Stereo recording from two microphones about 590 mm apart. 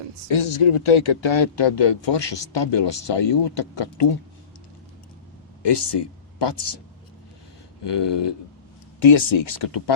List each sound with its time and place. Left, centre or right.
0.3 s speech: left
5.6 s speech: left
7.9 s speech: left